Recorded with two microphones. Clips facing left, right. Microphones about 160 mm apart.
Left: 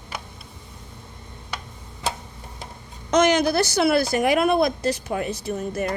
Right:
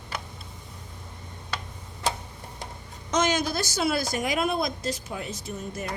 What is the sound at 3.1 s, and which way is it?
Speech, 65° left (ahead or behind).